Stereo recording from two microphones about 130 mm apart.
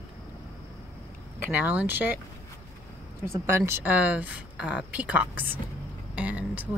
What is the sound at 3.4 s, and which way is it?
A woman's voice, 20° right (ahead or behind).